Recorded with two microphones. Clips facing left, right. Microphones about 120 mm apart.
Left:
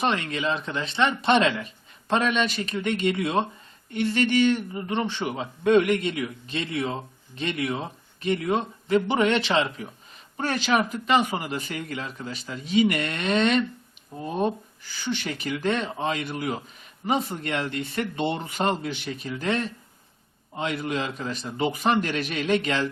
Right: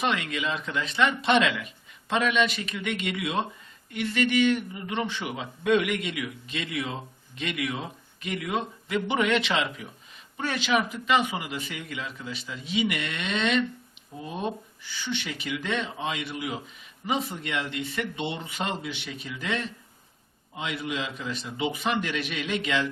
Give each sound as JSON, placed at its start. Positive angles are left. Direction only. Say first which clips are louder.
{"t": 0.0, "sound": "a man's voice", "louder": "left 2 dB", "side_deg": 35}